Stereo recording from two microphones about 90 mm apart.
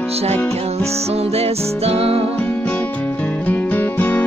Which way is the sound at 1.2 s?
90° right.